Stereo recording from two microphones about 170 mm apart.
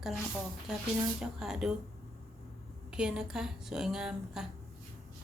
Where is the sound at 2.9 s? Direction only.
5° right (ahead or behind).